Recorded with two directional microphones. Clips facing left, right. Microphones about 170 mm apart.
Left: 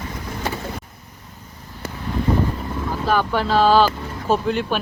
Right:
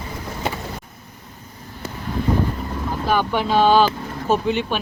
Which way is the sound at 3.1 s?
Centre (ahead or behind).